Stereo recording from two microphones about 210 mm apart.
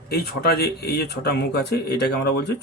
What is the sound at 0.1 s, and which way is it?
Speech, 50° left (ahead or behind).